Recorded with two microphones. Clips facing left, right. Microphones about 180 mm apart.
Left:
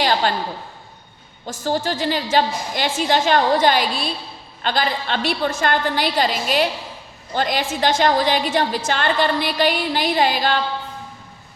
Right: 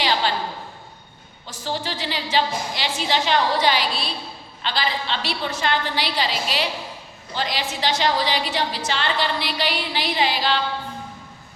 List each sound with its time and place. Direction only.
0.0 s a woman's voice: 50° left (ahead or behind)
1.5 s a woman's voice: 45° left (ahead or behind)